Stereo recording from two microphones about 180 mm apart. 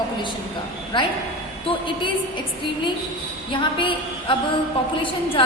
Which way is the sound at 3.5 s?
25° left (ahead or behind).